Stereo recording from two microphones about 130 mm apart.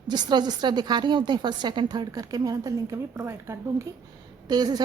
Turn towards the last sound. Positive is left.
turn(degrees=-30)  # may be behind; listen again after turning